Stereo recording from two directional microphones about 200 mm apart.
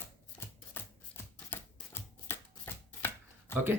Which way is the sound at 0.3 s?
10° left (ahead or behind).